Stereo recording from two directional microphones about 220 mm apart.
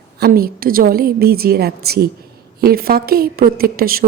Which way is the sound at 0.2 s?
45° right (ahead or behind).